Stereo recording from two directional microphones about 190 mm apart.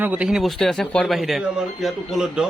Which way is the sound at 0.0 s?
5° right (ahead or behind).